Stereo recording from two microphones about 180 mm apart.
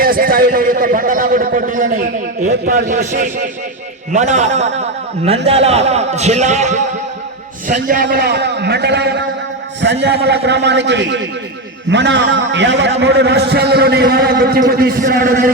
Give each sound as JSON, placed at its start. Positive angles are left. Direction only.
{"t": 0.0, "sound": "a man's voice", "side_deg": -50}
{"t": 8.0, "sound": "a man's voice", "side_deg": -65}